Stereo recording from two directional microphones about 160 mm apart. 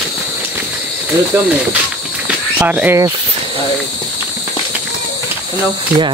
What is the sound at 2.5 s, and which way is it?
Speech, 10° right (ahead or behind).